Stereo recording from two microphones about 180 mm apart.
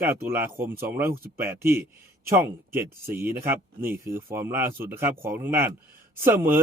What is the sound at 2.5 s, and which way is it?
Speech, 10° right (ahead or behind).